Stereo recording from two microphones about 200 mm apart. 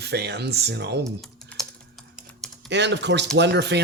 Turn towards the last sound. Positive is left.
turn(degrees=-60)  # may be behind; listen again after turning